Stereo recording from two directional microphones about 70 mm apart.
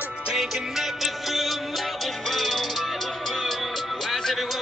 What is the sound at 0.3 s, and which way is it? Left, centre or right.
Music, centre.